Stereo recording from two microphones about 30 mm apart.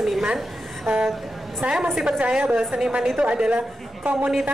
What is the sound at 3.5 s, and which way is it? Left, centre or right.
Speech, right.